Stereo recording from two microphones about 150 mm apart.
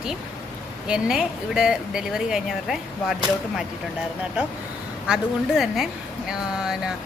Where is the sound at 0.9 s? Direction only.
5° right (ahead or behind).